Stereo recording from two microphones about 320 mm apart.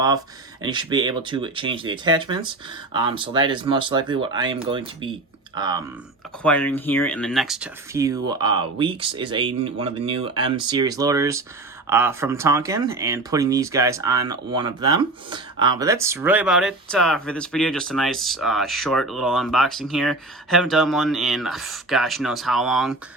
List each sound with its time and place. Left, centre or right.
0.6 s speech: centre
6.4 s speech: centre